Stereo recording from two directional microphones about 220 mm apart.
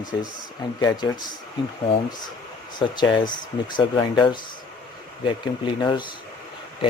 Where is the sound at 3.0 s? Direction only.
20° left (ahead or behind).